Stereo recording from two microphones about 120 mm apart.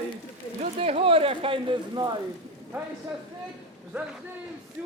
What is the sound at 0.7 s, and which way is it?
Speech, 55° right (ahead or behind).